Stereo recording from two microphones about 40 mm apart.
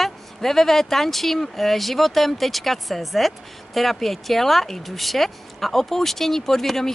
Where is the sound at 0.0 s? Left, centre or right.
Centre.